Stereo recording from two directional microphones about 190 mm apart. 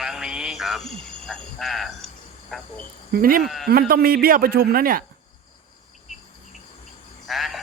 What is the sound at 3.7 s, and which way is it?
Speech, 55° right (ahead or behind).